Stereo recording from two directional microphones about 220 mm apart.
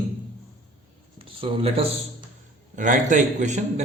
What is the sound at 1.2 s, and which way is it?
A man's voice, 25° right (ahead or behind).